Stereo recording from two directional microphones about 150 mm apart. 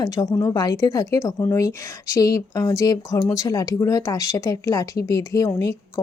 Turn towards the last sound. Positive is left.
turn(degrees=20)  # may be behind; listen again after turning